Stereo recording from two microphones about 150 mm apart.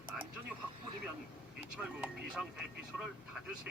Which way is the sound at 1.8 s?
5° right (ahead or behind).